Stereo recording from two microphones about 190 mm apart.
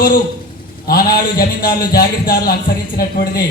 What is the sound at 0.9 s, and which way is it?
A man's voice, 55° left (ahead or behind).